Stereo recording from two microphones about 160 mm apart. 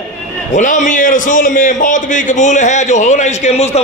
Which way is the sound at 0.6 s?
50° left (ahead or behind).